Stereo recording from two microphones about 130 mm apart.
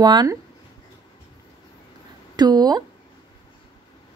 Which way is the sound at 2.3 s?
30° right (ahead or behind).